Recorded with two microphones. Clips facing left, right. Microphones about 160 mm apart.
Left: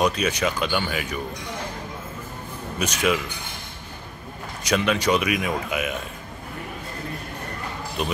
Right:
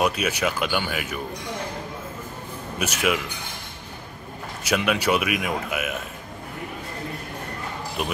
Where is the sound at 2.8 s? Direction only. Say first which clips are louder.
Left 1 dB; 10° right (ahead or behind).